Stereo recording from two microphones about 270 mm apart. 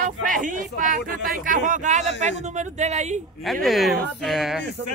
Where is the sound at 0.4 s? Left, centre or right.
Right.